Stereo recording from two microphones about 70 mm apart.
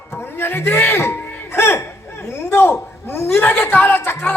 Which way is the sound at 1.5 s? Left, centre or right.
Left.